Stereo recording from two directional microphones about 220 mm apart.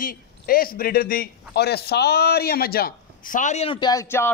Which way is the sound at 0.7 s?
40° left (ahead or behind).